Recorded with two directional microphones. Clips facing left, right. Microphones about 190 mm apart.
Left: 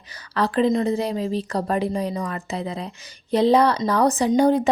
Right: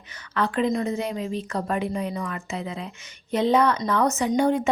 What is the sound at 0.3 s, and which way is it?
A woman's voice, 35° left (ahead or behind).